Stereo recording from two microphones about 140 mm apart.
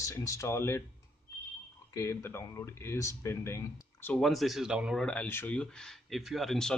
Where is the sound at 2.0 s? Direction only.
20° left (ahead or behind).